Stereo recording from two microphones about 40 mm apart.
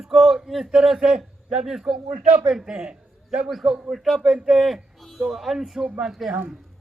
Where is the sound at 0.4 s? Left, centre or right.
Centre.